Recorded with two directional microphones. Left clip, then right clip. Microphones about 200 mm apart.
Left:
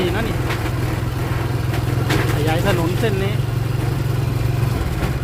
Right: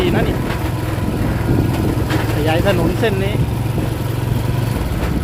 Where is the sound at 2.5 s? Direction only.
10° right (ahead or behind).